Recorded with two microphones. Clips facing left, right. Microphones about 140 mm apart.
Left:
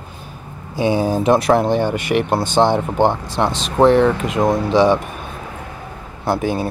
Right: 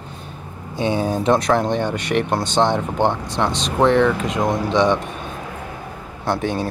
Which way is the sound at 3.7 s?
30° left (ahead or behind).